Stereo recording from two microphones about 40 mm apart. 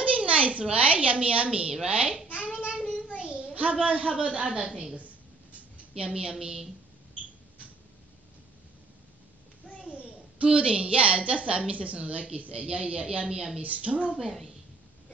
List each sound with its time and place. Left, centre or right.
0.0 s a woman's voice: right
2.4 s child singing: right
2.8 s child singing: left
3.2 s child singing: right
4.0 s a woman's voice: right
4.9 s a sound: right
6.0 s a woman's voice: right
9.8 s a woman's voice: right
13.6 s a woman's voice: right